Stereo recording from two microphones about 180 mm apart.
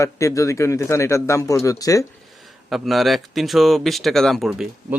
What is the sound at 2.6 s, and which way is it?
Speech, centre (ahead or behind).